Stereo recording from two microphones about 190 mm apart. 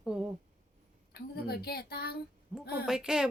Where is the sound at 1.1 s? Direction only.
55° left (ahead or behind).